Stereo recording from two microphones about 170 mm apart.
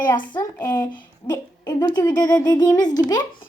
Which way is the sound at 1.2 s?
30° left (ahead or behind).